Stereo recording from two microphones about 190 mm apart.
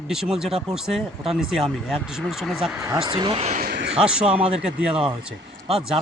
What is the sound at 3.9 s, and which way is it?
Speech, 5° right (ahead or behind).